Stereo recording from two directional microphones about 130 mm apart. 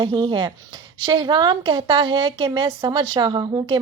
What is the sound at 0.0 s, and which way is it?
A woman's voice, 35° right (ahead or behind).